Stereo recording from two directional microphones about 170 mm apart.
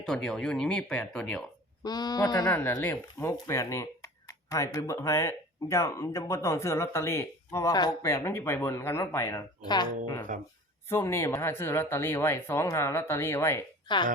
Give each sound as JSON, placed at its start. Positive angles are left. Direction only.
{"t": 0.0, "sound": "speech", "side_deg": 5}
{"t": 1.8, "sound": "speech", "side_deg": 25}
{"t": 2.5, "sound": "speech", "side_deg": 10}
{"t": 10.8, "sound": "speech", "side_deg": 15}
{"t": 13.8, "sound": "speech", "side_deg": 25}